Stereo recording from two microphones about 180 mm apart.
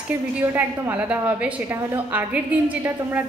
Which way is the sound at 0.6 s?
10° right (ahead or behind).